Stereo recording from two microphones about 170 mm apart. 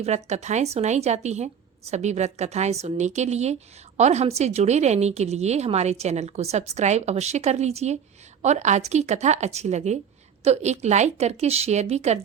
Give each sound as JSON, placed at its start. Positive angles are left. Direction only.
{"t": 0.0, "sound": "a woman's voice", "side_deg": -40}